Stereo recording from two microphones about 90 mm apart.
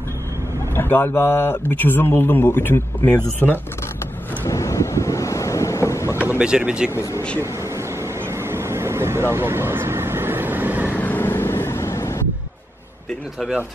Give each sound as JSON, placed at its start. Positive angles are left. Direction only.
{"t": 0.7, "sound": "speech", "side_deg": 25}
{"t": 4.5, "sound": "wind noise", "side_deg": 35}
{"t": 6.2, "sound": "speech", "side_deg": -15}
{"t": 6.9, "sound": "speech", "side_deg": 35}
{"t": 7.3, "sound": "vehicle", "side_deg": -30}
{"t": 10.9, "sound": "vehicle", "side_deg": 20}